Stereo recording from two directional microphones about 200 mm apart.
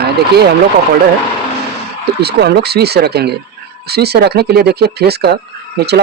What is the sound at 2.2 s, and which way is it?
Speech, 55° right (ahead or behind).